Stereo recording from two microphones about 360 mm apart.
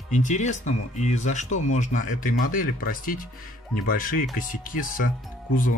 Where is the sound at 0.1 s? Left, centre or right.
Centre.